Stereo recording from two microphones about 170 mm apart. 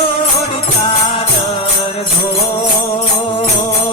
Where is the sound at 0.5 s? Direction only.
35° left (ahead or behind).